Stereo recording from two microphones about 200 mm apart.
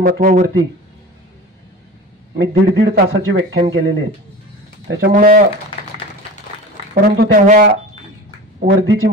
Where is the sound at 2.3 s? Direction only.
55° right (ahead or behind).